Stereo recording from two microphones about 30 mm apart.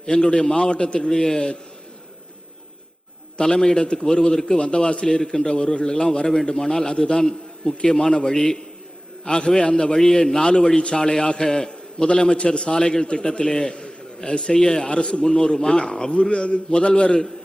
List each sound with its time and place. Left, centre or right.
0.0 s a man's voice: left
3.4 s a man's voice: left
5.0 s a man's voice: centre
14.8 s a man's voice: left